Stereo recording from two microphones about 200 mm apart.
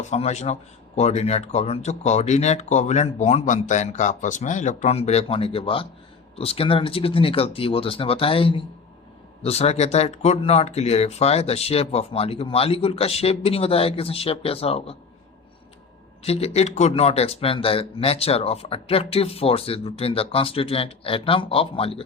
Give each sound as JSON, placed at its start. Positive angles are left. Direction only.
{"t": 0.0, "sound": "speech", "side_deg": 35}
{"t": 16.2, "sound": "speech", "side_deg": 30}